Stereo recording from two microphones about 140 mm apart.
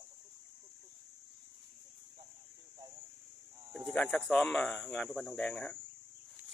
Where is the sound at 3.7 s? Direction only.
5° left (ahead or behind).